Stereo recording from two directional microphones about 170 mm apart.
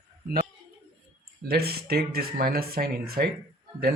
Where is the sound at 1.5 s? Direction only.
65° right (ahead or behind).